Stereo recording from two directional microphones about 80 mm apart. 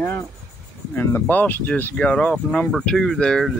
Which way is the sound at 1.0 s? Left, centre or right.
Left.